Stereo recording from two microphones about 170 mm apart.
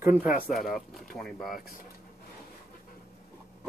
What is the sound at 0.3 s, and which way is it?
Speech, centre (ahead or behind).